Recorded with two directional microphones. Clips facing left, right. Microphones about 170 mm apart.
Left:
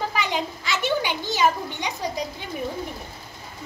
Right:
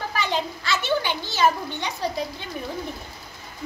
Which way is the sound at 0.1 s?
15° left (ahead or behind).